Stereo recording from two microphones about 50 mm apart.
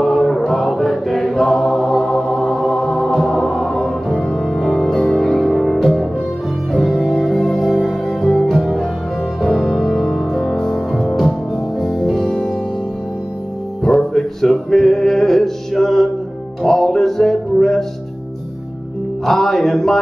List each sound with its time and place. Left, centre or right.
0.0 s chant: centre
6.7 s music: centre
9.5 s music: centre
13.8 s music: centre
19.2 s music: centre